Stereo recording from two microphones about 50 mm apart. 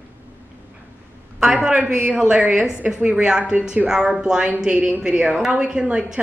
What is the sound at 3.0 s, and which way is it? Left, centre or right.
Speech, centre.